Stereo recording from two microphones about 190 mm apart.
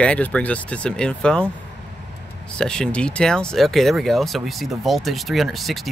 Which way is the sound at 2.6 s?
5° left (ahead or behind).